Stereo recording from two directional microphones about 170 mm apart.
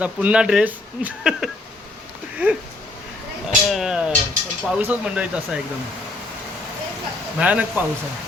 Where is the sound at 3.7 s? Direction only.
Centre (ahead or behind).